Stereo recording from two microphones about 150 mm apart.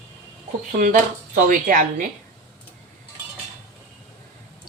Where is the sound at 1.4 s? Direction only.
65° right (ahead or behind).